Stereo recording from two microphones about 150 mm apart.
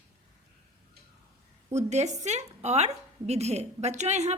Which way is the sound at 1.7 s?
50° right (ahead or behind).